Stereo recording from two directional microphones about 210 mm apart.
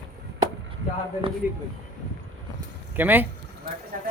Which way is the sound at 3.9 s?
40° right (ahead or behind).